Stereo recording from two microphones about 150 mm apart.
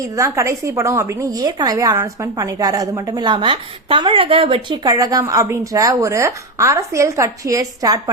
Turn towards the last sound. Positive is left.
turn(degrees=-25)  # may be behind; listen again after turning